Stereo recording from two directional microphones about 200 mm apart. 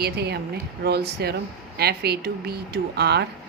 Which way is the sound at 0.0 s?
55° right (ahead or behind).